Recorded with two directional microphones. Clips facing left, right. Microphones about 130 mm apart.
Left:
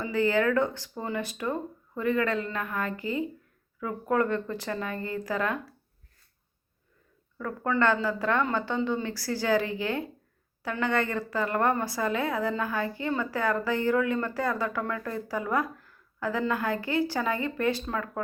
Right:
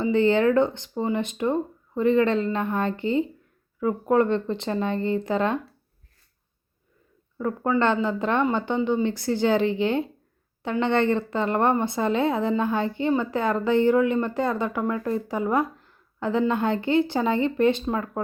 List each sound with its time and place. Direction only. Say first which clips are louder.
0.0 s a woman's voice: right 5 dB; 25° right (ahead or behind)
7.3 s a woman's voice: right 4 dB; 25° right (ahead or behind)